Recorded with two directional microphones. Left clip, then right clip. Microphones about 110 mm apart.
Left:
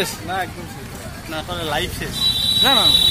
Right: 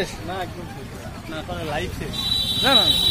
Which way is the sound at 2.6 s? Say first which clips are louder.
Left 2 dB; 5° left (ahead or behind).